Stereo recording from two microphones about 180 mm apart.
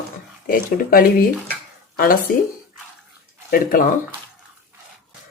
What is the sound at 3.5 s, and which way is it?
Speech, 50° left (ahead or behind).